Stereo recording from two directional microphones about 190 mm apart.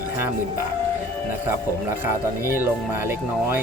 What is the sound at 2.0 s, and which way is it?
Speech, 10° right (ahead or behind).